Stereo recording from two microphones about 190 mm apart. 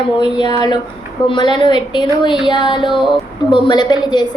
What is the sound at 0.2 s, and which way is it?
A woman's voice, 25° left (ahead or behind).